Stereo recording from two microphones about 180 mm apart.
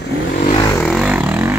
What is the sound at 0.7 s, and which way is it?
Vehicle, 5° left (ahead or behind).